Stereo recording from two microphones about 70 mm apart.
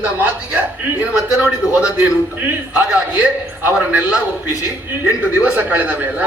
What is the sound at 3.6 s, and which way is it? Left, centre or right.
Speech, right.